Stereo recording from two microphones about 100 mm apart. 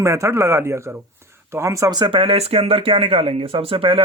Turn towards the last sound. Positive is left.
turn(degrees=-60)  # may be behind; listen again after turning